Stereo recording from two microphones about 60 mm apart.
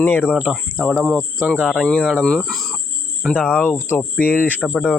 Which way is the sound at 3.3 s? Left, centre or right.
Centre.